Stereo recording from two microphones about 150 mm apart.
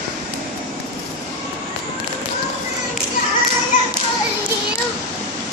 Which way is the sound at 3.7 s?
60° left (ahead or behind).